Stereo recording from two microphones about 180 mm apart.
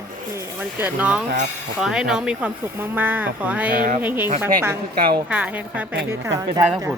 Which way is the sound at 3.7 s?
50° right (ahead or behind).